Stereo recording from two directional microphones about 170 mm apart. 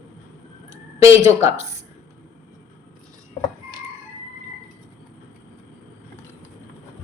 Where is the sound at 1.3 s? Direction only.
15° right (ahead or behind).